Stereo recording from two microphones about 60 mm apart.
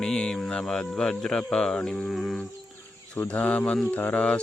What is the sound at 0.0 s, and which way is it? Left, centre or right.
Speech, centre.